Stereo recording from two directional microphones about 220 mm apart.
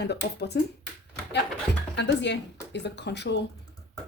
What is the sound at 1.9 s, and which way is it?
Speech, 55° left (ahead or behind).